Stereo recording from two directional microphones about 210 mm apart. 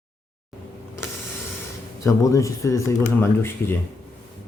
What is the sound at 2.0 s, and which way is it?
Speech, 15° left (ahead or behind).